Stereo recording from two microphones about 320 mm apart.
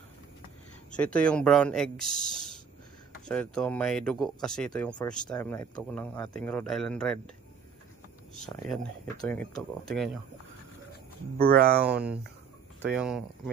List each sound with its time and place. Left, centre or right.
0.9 s speech: centre
2.0 s speech: left
3.3 s speech: centre
8.6 s speech: centre
11.3 s speech: right
11.9 s speech: centre